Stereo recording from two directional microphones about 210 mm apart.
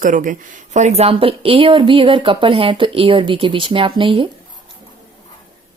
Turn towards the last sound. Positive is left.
turn(degrees=-25)  # may be behind; listen again after turning